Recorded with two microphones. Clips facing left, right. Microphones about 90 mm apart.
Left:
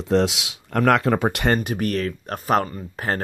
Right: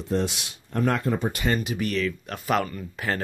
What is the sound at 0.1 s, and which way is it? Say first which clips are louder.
Speech: left 7 dB; 90° left.